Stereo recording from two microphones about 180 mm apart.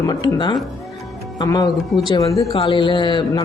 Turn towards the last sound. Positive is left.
turn(degrees=25)  # may be behind; listen again after turning